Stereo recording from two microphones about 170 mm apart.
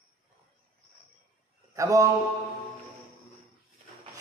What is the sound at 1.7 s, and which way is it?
Speech, 20° right (ahead or behind).